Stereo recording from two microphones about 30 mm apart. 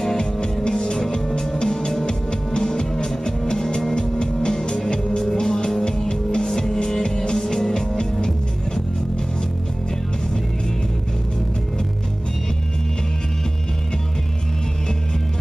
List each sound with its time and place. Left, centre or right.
0.0 s music: left